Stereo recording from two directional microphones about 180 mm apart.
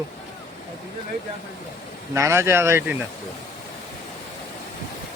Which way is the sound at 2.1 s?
15° right (ahead or behind).